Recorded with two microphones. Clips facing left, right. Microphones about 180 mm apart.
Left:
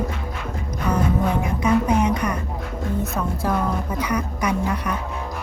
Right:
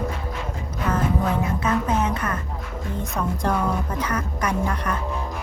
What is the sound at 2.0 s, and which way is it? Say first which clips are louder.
A woman's voice: left 3 dB; 15° left (ahead or behind).